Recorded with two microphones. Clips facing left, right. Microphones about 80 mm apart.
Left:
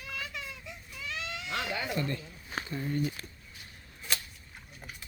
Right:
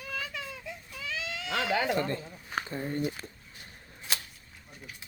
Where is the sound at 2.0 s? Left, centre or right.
Right.